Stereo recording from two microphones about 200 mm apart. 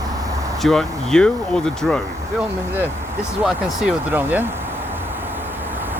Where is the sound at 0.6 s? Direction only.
5° left (ahead or behind).